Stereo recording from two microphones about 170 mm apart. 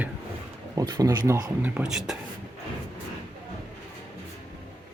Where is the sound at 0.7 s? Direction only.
20° right (ahead or behind); by 2.2 s 5° right (ahead or behind).